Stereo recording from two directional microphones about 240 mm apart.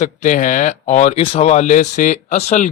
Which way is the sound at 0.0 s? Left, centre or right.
Left.